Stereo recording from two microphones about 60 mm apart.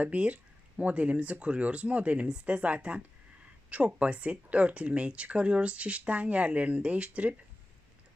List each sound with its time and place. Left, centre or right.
0.0 s speech: right